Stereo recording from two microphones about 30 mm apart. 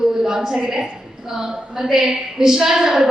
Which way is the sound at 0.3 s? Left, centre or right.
Centre.